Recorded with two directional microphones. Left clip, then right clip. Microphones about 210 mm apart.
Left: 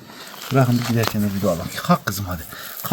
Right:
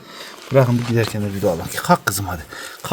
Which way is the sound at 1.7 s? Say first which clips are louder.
Right 4 dB; 55° right (ahead or behind).